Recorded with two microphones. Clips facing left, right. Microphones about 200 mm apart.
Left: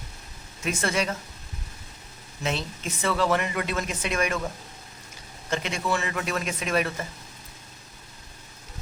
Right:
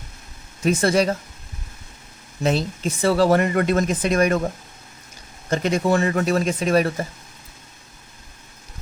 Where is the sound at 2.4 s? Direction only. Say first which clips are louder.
Right 8 dB; 35° right (ahead or behind).